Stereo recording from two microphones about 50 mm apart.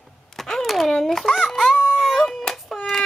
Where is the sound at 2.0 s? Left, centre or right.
Centre.